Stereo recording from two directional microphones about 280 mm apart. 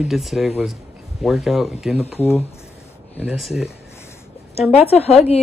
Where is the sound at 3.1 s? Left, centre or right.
Centre.